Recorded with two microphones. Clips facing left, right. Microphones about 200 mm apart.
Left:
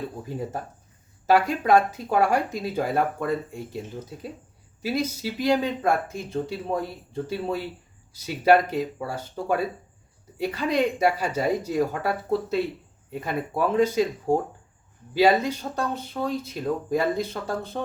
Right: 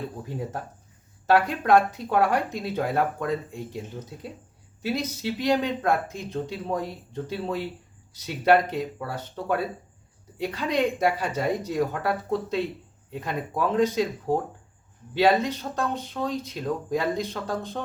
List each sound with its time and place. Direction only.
1.3 s speech: 5° left (ahead or behind)
4.8 s a woman's voice: 10° left (ahead or behind)